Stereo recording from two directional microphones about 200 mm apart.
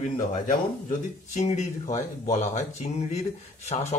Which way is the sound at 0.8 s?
35° left (ahead or behind).